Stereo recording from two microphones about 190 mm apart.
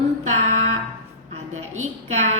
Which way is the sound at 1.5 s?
90° right.